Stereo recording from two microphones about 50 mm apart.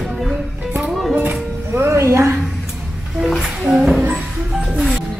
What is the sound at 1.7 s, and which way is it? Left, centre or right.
Music, right.